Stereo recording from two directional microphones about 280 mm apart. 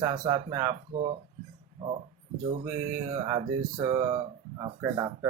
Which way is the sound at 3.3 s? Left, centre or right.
Centre.